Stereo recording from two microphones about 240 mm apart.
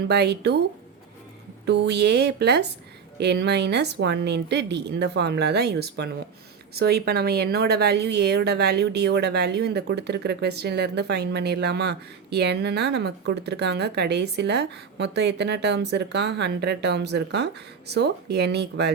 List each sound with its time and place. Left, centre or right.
0.1 s a woman's voice: right
1.6 s a woman's voice: right